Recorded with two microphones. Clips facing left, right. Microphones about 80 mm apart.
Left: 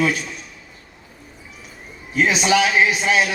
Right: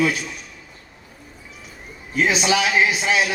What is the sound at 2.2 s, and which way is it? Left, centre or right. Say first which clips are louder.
A man's voice: left 2 dB; left.